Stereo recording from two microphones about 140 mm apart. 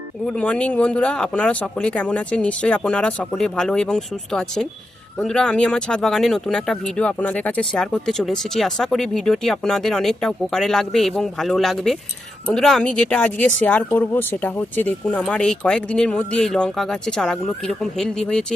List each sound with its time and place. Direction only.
0.3 s speech: 10° left (ahead or behind)